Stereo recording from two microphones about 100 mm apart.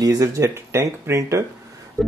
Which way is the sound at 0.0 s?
35° right (ahead or behind).